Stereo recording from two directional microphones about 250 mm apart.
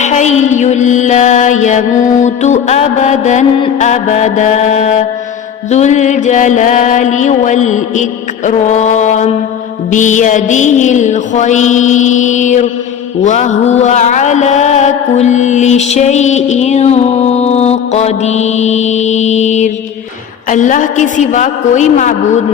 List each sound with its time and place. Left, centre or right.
0.0 s mantra: left